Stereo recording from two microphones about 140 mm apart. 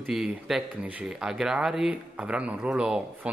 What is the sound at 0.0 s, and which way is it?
A woman's voice, 5° right (ahead or behind).